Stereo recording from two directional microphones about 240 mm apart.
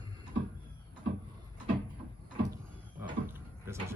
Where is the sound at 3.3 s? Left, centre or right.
Centre.